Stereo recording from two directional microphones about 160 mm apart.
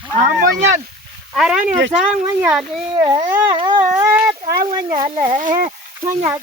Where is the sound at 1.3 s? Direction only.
5° right (ahead or behind).